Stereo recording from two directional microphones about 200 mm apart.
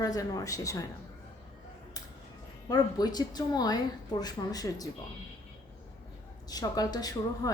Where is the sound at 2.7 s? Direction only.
20° left (ahead or behind).